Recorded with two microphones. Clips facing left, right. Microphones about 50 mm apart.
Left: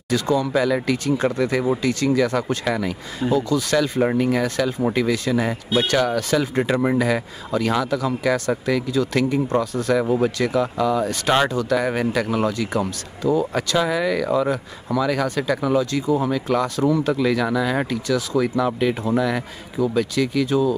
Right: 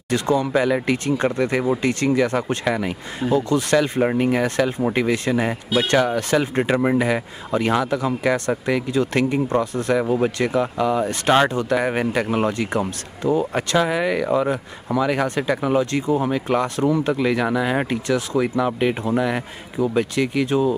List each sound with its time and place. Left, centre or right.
0.1 s a man's voice: right
0.5 s speech: right
0.8 s a man's voice: right
1.1 s speech: right
1.8 s speech: right; by 2.9 s centre
3.3 s a man's voice: right
4.2 s speech: right
6.7 s speech: centre
9.9 s speech: centre; by 16.8 s right
16.8 s speech: centre
18.4 s speech: centre